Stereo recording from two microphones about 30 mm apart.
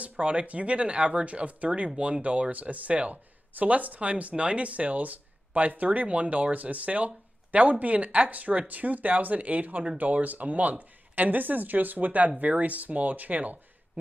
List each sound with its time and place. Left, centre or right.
0.2 s speech: right
2.5 s speech: right
6.0 s speech: right